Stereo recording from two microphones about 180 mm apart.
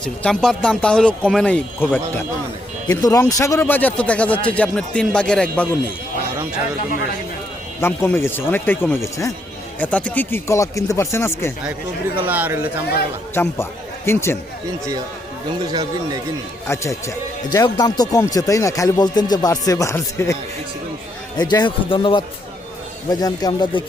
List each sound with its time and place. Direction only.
0.0 s speech: 5° left (ahead or behind)
2.8 s speech: 20° left (ahead or behind)
7.8 s speech: 15° left (ahead or behind)
12.1 s speech: 10° right (ahead or behind)
13.3 s a man's voice: 15° left (ahead or behind)
15.7 s speech: 20° right (ahead or behind)
16.6 s speech: 15° left (ahead or behind)